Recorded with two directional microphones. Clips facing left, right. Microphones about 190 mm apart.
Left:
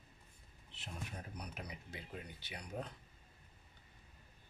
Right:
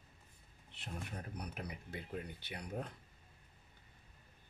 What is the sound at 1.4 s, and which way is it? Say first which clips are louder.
Speech: right 3 dB; 55° right (ahead or behind).